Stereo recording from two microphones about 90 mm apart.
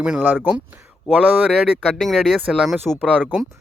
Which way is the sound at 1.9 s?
5° left (ahead or behind).